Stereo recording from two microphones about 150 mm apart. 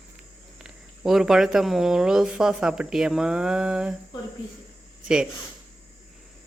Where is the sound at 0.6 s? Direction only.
5° right (ahead or behind).